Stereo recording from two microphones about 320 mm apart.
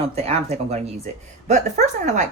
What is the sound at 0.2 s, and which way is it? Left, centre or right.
Speech, centre.